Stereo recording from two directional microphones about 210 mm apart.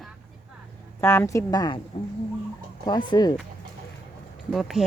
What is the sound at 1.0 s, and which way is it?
Speech, 10° left (ahead or behind).